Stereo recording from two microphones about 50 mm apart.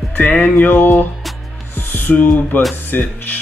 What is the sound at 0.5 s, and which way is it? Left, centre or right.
Music, left.